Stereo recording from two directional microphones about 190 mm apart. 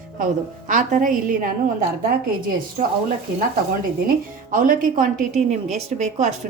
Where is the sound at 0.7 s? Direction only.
45° right (ahead or behind).